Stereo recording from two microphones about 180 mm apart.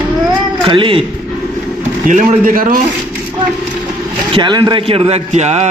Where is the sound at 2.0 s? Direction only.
45° right (ahead or behind).